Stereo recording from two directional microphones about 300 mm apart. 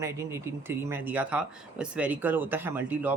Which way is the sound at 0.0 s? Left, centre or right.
Centre.